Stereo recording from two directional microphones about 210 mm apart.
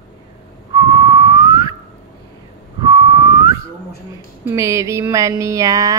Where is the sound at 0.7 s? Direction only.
20° right (ahead or behind).